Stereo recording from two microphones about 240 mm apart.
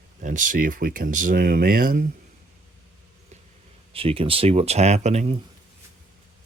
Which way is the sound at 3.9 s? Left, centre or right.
Right.